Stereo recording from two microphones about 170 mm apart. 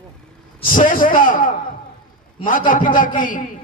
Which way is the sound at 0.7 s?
50° left (ahead or behind).